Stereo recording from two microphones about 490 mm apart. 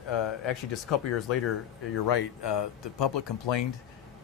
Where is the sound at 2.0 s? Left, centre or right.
Left.